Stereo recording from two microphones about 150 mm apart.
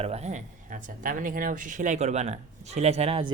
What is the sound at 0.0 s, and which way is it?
Speech, 45° right (ahead or behind).